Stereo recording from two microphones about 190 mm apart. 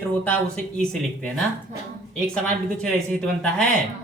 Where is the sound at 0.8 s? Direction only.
5° left (ahead or behind).